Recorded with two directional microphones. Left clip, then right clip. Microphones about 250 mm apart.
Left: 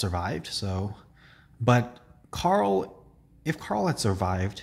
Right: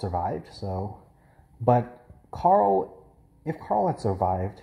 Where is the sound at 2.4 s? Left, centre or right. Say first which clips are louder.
Right 4 dB; left.